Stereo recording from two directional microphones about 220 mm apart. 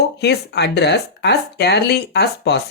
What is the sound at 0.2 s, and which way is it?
Speech, 50° left (ahead or behind).